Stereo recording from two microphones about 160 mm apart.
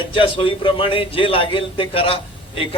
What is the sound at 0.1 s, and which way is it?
A man's voice, 35° left (ahead or behind).